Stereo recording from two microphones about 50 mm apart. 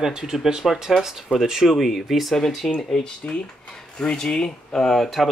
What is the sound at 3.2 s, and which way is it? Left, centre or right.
Speech, left.